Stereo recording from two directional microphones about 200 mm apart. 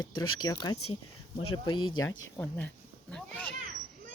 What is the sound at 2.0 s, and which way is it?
Speech, 75° left (ahead or behind).